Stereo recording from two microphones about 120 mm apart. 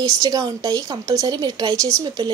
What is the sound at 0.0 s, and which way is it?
Speech, 30° right (ahead or behind).